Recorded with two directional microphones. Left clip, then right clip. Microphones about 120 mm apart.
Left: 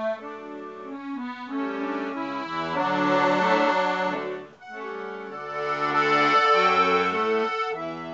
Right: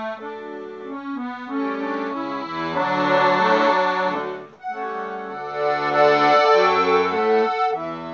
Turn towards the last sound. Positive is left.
turn(degrees=-15)  # may be behind; listen again after turning